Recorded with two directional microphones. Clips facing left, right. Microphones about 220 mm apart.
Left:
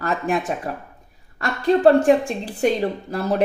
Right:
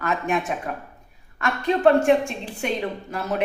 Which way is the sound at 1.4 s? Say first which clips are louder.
Left 4 dB; 35° left (ahead or behind).